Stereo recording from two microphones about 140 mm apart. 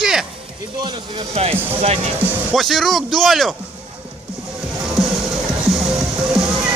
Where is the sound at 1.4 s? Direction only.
45° right (ahead or behind).